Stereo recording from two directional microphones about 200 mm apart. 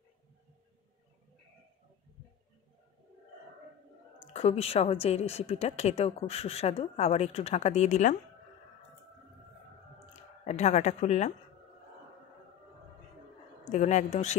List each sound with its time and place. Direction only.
4.3 s a woman's voice: 30° left (ahead or behind)
10.4 s a woman's voice: 35° left (ahead or behind)
13.7 s a woman's voice: 35° left (ahead or behind)